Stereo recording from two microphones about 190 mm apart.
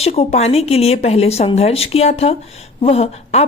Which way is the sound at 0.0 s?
30° left (ahead or behind).